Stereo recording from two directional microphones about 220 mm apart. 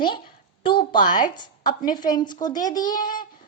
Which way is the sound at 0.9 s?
35° left (ahead or behind).